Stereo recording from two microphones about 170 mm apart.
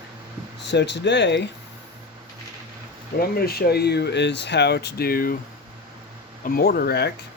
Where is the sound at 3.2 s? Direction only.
65° left (ahead or behind).